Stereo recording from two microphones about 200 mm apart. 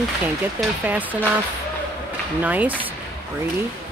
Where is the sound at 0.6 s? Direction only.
10° right (ahead or behind).